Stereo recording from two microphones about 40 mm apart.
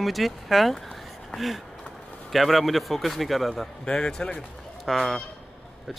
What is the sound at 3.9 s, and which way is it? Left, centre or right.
Speech, left.